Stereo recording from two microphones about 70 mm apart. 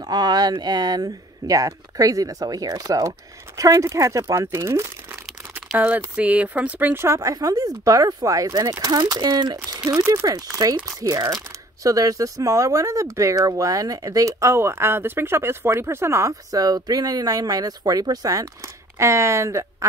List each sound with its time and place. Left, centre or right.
0.0 s speech: right
5.8 s speech: right
7.2 s speech: right
9.1 s speech: right
9.8 s speech: right
18.9 s speech: right